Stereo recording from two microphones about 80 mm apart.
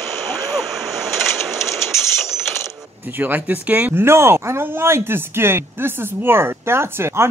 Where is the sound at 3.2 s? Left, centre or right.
Right.